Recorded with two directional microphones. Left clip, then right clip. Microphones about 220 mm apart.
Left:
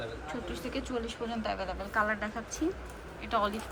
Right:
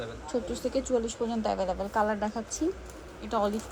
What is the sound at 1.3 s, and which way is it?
A woman's voice, 25° right (ahead or behind).